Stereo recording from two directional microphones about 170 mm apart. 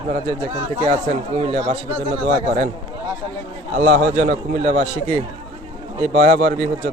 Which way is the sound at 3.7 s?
45° right (ahead or behind).